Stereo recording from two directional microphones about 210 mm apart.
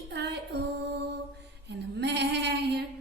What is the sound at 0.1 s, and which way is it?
Female singing, 55° right (ahead or behind).